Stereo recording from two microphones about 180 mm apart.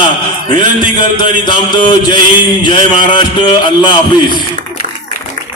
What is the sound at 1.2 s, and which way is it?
Mantra, 25° left (ahead or behind).